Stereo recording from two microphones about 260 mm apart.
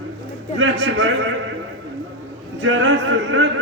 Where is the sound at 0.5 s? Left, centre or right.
Right.